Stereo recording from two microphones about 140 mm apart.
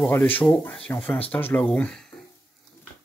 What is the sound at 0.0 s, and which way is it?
Speech, 15° left (ahead or behind).